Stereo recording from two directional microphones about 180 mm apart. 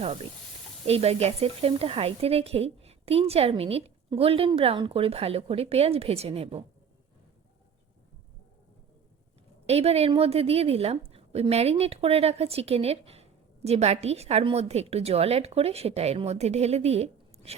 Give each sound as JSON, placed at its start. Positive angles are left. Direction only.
{"t": 0.9, "sound": "speech", "side_deg": -35}
{"t": 9.6, "sound": "speech", "side_deg": -35}